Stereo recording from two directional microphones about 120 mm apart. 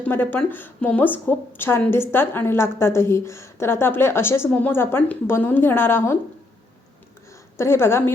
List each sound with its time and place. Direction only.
0.0 s a woman's voice: 15° left (ahead or behind)
7.5 s a woman's voice: 20° left (ahead or behind)